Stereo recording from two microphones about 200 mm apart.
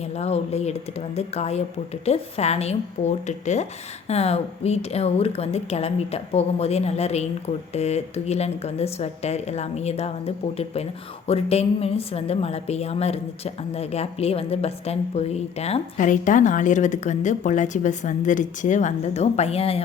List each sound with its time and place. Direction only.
0.0 s a woman's voice: 30° left (ahead or behind)